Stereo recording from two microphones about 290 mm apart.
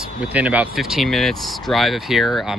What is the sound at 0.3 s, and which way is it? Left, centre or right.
Speech, centre.